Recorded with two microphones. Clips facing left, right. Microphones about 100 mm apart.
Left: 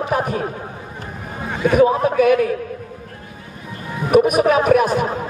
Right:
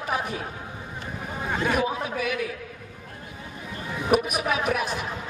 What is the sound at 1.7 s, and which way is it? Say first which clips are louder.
Speech: left 14 dB; 50° left (ahead or behind).